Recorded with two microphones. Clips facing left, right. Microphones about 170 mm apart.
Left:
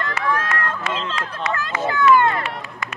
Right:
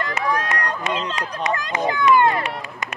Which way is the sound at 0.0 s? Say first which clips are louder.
Even; 15° right (ahead or behind).